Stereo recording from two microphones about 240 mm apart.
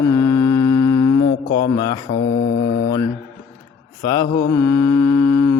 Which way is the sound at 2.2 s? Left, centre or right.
Left.